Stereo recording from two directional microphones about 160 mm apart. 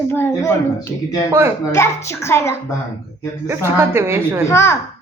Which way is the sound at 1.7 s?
15° left (ahead or behind).